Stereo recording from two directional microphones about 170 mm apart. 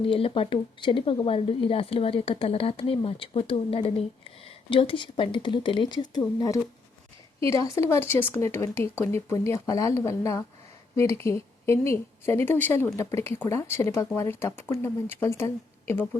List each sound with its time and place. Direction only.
0.0 s speech: 35° left (ahead or behind); by 16.0 s 15° left (ahead or behind)